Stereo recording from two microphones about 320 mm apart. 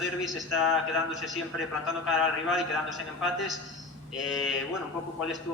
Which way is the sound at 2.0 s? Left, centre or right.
Centre.